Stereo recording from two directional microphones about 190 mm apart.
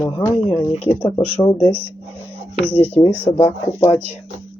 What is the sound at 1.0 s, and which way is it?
Speech, 20° left (ahead or behind).